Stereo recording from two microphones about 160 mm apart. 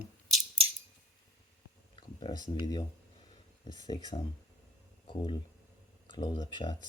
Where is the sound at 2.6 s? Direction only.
25° left (ahead or behind).